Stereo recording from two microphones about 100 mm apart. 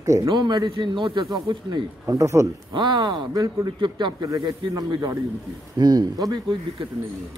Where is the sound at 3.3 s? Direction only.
35° right (ahead or behind).